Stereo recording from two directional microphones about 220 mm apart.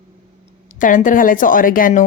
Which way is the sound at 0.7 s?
35° left (ahead or behind).